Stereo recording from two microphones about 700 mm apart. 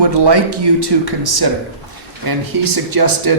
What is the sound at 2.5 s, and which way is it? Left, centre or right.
Speech, right.